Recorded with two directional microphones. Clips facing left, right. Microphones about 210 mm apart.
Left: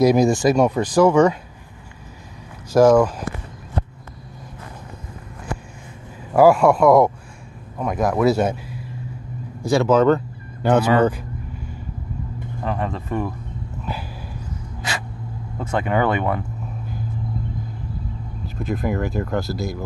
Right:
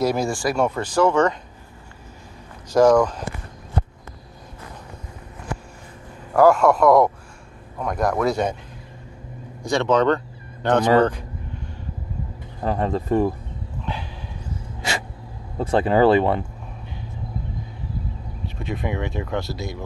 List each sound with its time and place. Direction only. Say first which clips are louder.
0.0 s speech: left 7 dB; 15° left (ahead or behind)
2.7 s speech: left 2 dB; 5° left (ahead or behind)
6.3 s speech: left 2 dB; 5° left (ahead or behind)
9.6 s speech: left 3 dB; 5° left (ahead or behind)
11.0 s a sound: even; 5° left (ahead or behind)
12.6 s speech: right 4 dB; 35° right (ahead or behind)
13.9 s speech: even; 5° left (ahead or behind)
15.5 s speech: right 3 dB; 35° right (ahead or behind)
18.6 s speech: left 4 dB; centre (ahead or behind)